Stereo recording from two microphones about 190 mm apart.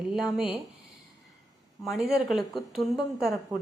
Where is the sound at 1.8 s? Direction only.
Centre (ahead or behind).